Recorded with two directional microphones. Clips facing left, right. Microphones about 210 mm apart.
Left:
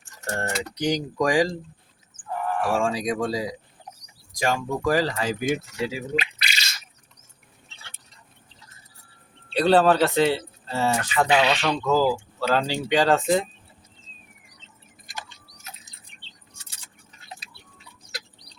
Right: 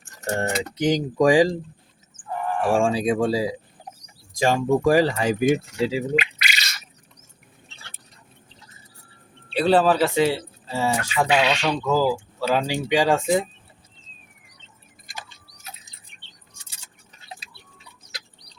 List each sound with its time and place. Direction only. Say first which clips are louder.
0.3 s speech: right 3 dB; 20° right (ahead or behind)
2.4 s a sound: right 1 dB; centre (ahead or behind)
2.6 s speech: right 5 dB; 30° right (ahead or behind)
9.5 s speech: even; 5° right (ahead or behind)